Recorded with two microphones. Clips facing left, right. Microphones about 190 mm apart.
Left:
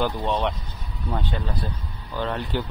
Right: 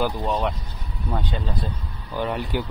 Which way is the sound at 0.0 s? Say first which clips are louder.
Even; 5° right (ahead or behind).